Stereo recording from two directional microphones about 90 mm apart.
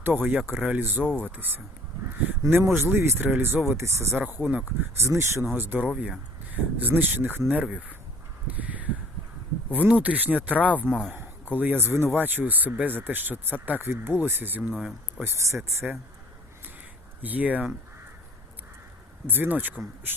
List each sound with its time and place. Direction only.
0.0 s speech: 20° right (ahead or behind)
1.0 s speech: 15° left (ahead or behind)
1.4 s speech: 25° right (ahead or behind)
8.4 s crow: 15° right (ahead or behind)
9.7 s speech: 15° right (ahead or behind)
10.8 s speech: 5° left (ahead or behind)
11.1 s speech: 20° right (ahead or behind)
17.2 s speech: 20° right (ahead or behind)
19.3 s speech: 20° right (ahead or behind)